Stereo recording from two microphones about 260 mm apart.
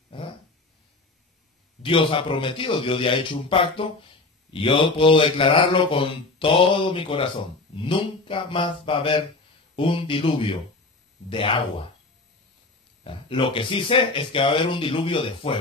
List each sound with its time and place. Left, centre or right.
1.8 s mantra: centre
13.0 s mantra: centre